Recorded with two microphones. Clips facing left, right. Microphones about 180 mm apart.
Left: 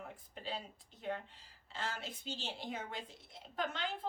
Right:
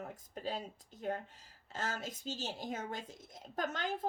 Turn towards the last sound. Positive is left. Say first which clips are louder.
# right 2 dB
turn(degrees=-45)  # may be behind; listen again after turning